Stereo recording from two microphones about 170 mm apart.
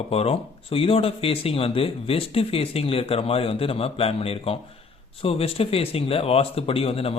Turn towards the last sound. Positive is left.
turn(degrees=35)  # may be behind; listen again after turning